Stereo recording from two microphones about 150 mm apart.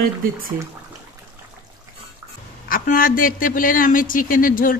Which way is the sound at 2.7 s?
70° left (ahead or behind).